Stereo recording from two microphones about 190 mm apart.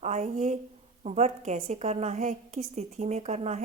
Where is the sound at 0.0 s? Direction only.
35° right (ahead or behind).